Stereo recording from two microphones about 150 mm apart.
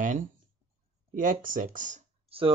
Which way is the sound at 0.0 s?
60° right (ahead or behind).